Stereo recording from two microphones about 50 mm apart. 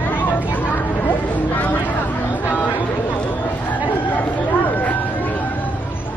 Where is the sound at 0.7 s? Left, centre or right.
Left.